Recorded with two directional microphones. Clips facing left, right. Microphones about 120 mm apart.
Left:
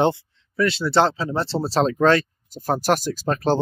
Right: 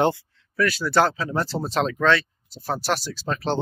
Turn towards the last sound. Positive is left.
turn(degrees=45)  # may be behind; listen again after turning